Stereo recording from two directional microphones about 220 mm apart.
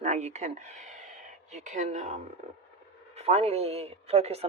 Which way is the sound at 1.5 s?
35° right (ahead or behind).